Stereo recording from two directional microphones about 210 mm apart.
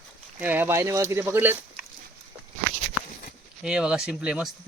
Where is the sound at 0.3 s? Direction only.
10° right (ahead or behind).